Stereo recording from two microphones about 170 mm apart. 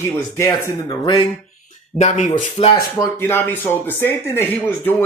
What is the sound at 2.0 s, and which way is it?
Speech, 45° left (ahead or behind).